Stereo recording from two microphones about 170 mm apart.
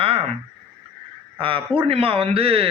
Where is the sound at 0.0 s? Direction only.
35° right (ahead or behind).